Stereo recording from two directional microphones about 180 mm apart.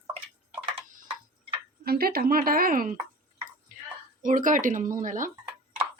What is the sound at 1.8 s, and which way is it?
Speech, 60° right (ahead or behind).